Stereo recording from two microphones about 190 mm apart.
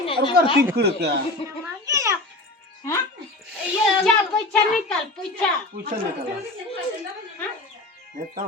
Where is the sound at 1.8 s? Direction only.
15° right (ahead or behind).